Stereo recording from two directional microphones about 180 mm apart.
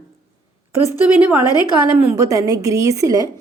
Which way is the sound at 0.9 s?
10° right (ahead or behind).